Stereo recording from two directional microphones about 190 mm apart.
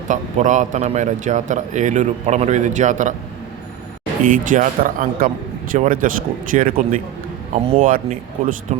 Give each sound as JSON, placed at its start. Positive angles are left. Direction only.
{"t": 0.1, "sound": "a man's voice", "side_deg": -40}
{"t": 4.2, "sound": "speech", "side_deg": -45}
{"t": 7.5, "sound": "a man's voice", "side_deg": -30}
{"t": 7.8, "sound": "speech", "side_deg": -45}